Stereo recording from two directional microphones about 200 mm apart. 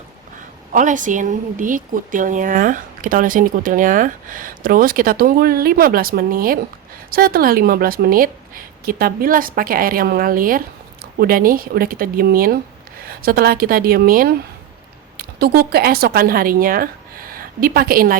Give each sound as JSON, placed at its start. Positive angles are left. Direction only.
{"t": 0.7, "sound": "a woman's voice", "side_deg": -40}